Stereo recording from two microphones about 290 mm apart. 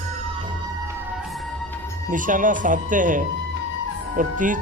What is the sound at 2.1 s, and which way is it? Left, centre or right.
Speech, right.